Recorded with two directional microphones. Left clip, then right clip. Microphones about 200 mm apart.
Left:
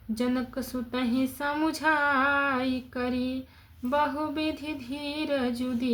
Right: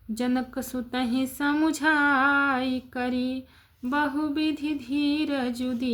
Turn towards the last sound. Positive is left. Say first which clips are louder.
# right 1 dB
turn(degrees=-30)  # may be behind; listen again after turning